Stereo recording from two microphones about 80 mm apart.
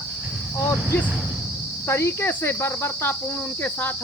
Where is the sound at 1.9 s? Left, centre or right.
Left.